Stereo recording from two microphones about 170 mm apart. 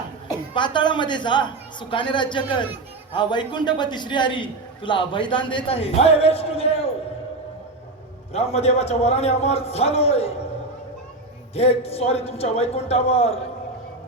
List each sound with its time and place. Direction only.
0.3 s a woman's voice: 25° left (ahead or behind)
8.3 s a man's voice: 35° left (ahead or behind)
11.5 s a man's voice: 35° left (ahead or behind)